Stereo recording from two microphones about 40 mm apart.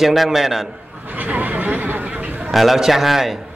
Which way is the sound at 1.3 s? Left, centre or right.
Right.